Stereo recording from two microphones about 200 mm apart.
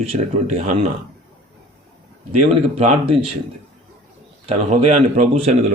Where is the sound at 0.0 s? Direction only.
30° right (ahead or behind).